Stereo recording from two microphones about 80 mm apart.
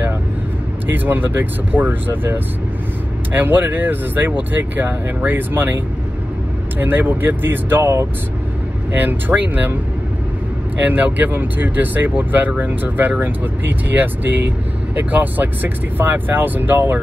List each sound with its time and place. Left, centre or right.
0.8 s speech: right
6.8 s speech: right
10.8 s speech: right